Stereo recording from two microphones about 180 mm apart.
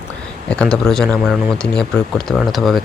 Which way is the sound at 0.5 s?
5° left (ahead or behind).